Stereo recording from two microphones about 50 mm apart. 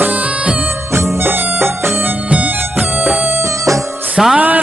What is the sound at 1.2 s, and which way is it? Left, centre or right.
Music, right.